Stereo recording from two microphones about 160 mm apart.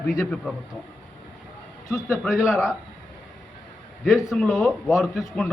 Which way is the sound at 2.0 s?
Centre (ahead or behind).